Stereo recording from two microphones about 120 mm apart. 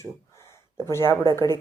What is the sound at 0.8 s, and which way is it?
Speech, 20° left (ahead or behind).